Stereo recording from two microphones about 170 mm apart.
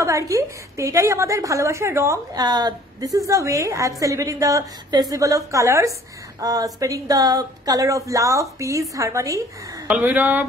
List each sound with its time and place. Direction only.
0.0 s a woman's voice: 20° right (ahead or behind)